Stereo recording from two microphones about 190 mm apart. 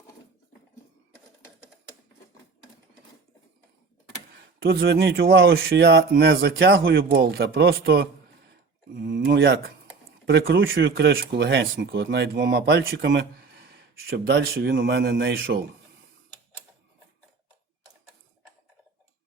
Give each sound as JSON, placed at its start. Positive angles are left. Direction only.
{"t": 4.6, "sound": "speech", "side_deg": -55}
{"t": 9.0, "sound": "a sound", "side_deg": -65}
{"t": 10.2, "sound": "speech", "side_deg": -60}